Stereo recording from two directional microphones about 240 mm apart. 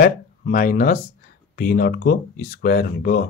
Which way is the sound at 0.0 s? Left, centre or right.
Left.